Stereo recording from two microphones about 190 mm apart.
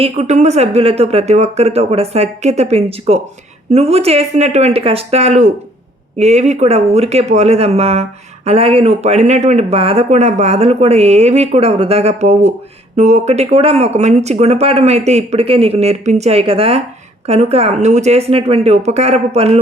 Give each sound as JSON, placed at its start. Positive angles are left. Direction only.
{"t": 0.0, "sound": "speech", "side_deg": -35}